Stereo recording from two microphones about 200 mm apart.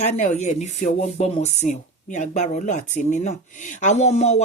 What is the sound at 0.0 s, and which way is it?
Speech, 35° left (ahead or behind).